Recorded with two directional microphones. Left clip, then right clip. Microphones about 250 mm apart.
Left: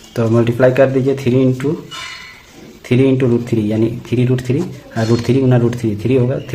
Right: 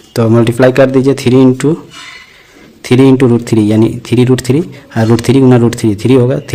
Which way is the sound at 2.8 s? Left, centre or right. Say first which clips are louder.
Right 7 dB; right.